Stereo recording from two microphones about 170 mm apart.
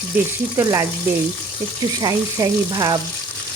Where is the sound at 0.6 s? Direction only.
20° right (ahead or behind).